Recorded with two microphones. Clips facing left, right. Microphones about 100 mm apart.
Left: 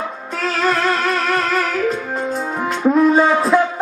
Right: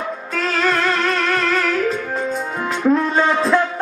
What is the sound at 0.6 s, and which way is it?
Music, 15° left (ahead or behind).